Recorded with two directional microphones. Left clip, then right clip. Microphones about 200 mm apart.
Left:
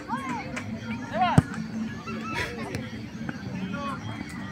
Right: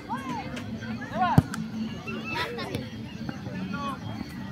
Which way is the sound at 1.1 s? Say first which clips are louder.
Left 1 dB; 25° left (ahead or behind).